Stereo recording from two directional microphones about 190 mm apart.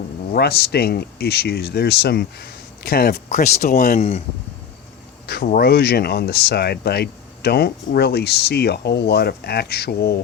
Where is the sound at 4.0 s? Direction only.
35° left (ahead or behind).